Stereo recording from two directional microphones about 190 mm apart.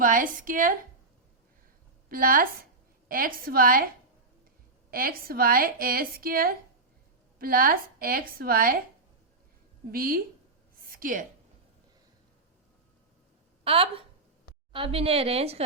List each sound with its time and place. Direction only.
0.0 s a woman's voice: 45° right (ahead or behind)
2.0 s a woman's voice: 50° right (ahead or behind)
4.9 s a woman's voice: 50° right (ahead or behind)
9.9 s a woman's voice: 50° right (ahead or behind)
10.8 s a sound: 45° right (ahead or behind)
13.7 s a woman's voice: 30° right (ahead or behind)